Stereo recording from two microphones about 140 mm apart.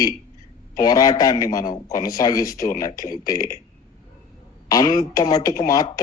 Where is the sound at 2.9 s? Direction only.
80° left.